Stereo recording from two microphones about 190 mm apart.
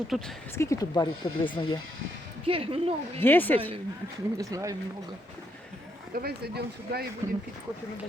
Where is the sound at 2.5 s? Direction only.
30° right (ahead or behind).